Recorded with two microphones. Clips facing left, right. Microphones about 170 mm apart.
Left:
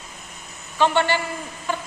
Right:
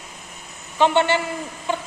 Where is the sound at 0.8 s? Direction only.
20° right (ahead or behind).